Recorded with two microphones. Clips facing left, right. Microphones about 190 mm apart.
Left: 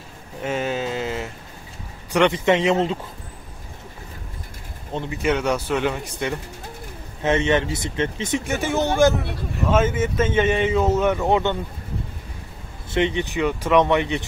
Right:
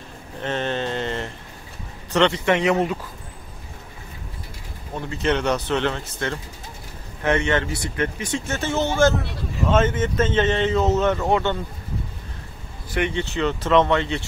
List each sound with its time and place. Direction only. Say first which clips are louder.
0.4 s a sound: left 1 dB; 5° left (ahead or behind)
2.1 s speech: left 1 dB; 15° left (ahead or behind)
4.9 s speech: left 1 dB; 15° left (ahead or behind)
12.9 s speech: left 2 dB; 20° left (ahead or behind)